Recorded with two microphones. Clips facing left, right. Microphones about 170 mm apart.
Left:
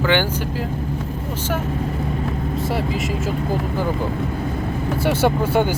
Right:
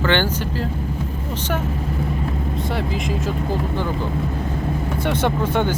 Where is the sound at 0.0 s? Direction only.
10° left (ahead or behind).